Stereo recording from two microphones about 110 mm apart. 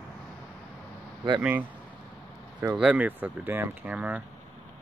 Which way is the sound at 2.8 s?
10° right (ahead or behind).